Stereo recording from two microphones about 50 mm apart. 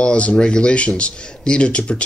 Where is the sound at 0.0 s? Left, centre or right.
Left.